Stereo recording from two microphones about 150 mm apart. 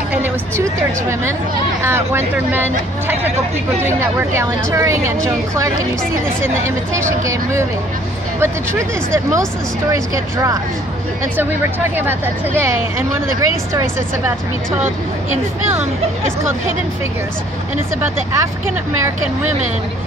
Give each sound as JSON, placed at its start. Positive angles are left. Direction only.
{"t": 0.1, "sound": "a woman's voice", "side_deg": -15}
{"t": 8.4, "sound": "speech", "side_deg": -20}
{"t": 12.0, "sound": "speech", "side_deg": -15}